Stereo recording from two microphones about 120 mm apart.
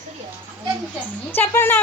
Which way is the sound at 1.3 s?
20° left (ahead or behind).